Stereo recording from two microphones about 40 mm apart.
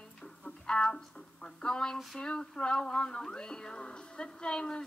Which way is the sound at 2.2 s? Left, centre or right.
Left.